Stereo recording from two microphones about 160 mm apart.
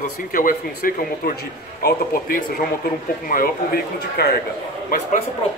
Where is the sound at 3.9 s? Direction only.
80° left.